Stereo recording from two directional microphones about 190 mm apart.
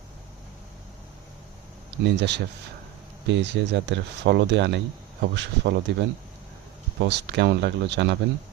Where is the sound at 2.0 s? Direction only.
65° right (ahead or behind).